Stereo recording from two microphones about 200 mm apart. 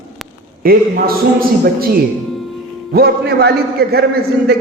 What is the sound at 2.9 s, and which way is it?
A man's voice, 50° right (ahead or behind).